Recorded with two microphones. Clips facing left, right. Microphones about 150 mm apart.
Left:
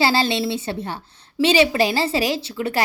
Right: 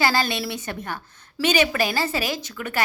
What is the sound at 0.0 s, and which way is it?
A woman's voice, 30° left (ahead or behind).